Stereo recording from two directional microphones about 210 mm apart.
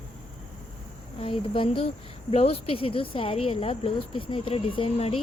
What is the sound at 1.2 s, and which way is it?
Speech, 25° left (ahead or behind).